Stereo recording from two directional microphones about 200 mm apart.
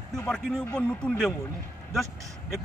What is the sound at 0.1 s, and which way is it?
Speech, centre (ahead or behind).